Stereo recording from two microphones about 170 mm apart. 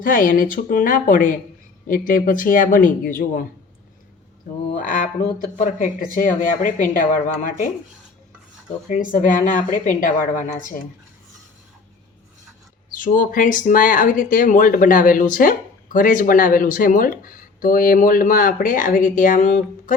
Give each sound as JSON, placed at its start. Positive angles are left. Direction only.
{"t": 0.0, "sound": "speech", "side_deg": 55}
{"t": 4.8, "sound": "speech", "side_deg": 50}
{"t": 8.9, "sound": "speech", "side_deg": 50}
{"t": 12.9, "sound": "speech", "side_deg": 55}